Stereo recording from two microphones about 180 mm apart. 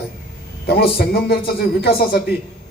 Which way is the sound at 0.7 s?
60° left (ahead or behind).